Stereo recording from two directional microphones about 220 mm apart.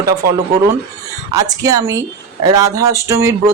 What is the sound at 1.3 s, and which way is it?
Speech, 15° right (ahead or behind).